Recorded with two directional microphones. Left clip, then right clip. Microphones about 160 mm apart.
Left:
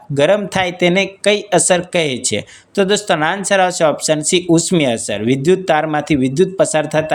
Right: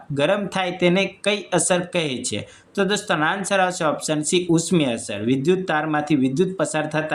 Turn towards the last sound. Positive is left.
turn(degrees=40)  # may be behind; listen again after turning